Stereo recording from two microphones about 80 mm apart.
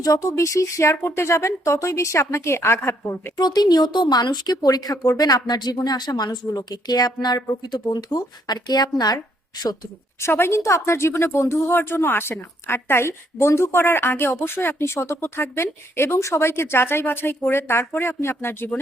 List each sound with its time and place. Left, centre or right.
0.0 s speech: left
3.3 s speech: left
10.2 s speech: left
11.7 s a woman's voice: left